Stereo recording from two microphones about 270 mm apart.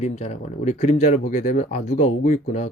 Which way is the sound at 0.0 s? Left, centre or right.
Left.